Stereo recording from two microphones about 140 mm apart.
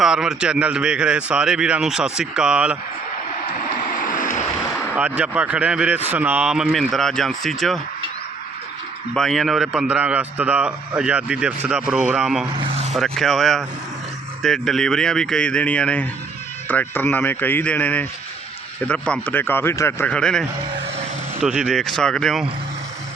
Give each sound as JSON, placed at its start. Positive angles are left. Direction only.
{"t": 0.0, "sound": "a man's voice", "side_deg": -5}
{"t": 4.7, "sound": "a man's voice", "side_deg": -10}
{"t": 9.1, "sound": "a man's voice", "side_deg": 0}
{"t": 12.5, "sound": "speech", "side_deg": -50}
{"t": 12.9, "sound": "a man's voice", "side_deg": 0}
{"t": 20.1, "sound": "a man's voice", "side_deg": 5}